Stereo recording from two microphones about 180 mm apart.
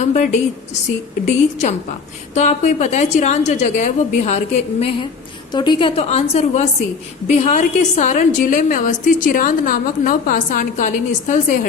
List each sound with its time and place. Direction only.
0.0 s a woman's voice: 40° left (ahead or behind)
5.5 s a woman's voice: 25° left (ahead or behind); by 11.5 s 45° left (ahead or behind)